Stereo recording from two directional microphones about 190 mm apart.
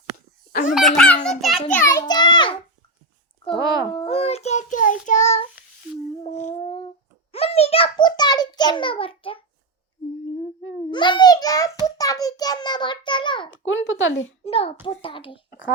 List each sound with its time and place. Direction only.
0.7 s belly laugh: centre (ahead or behind)
1.7 s a sound: 15° left (ahead or behind)
3.4 s a child's voice: 25° left (ahead or behind)
6.2 s a sound: 40° left (ahead or behind)
10.9 s a child's voice: 25° left (ahead or behind)
13.5 s speech: 90° left
14.4 s a child's voice: 30° left (ahead or behind)
15.4 s speech: 50° left (ahead or behind)